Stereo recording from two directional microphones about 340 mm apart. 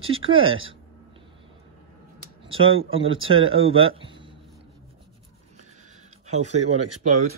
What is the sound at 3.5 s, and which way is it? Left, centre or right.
Speech, right.